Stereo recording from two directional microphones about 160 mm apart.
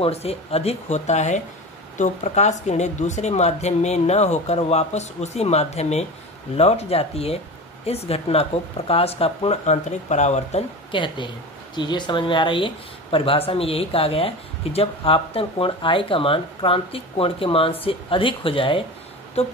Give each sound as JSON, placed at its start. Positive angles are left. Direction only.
{"t": 0.0, "sound": "speech", "side_deg": 40}
{"t": 11.0, "sound": "speech", "side_deg": 30}